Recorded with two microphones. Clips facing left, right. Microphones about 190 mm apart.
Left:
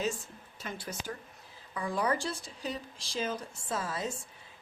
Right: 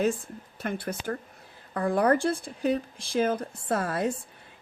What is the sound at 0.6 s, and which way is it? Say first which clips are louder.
A woman's voice: right 8 dB; 55° right (ahead or behind).